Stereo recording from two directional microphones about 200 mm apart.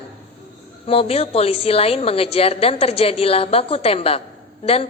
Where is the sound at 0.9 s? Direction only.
30° left (ahead or behind).